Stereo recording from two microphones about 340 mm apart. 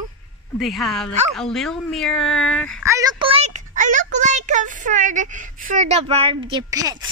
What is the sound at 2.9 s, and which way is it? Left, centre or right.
Speech, centre.